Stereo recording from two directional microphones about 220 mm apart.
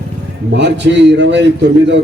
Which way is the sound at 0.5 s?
55° right (ahead or behind).